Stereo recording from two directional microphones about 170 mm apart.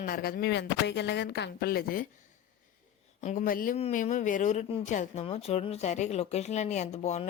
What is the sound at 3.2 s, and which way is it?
Speech, 50° left (ahead or behind).